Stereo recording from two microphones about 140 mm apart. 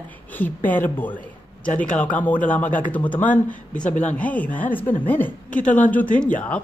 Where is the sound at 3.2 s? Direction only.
65° left (ahead or behind).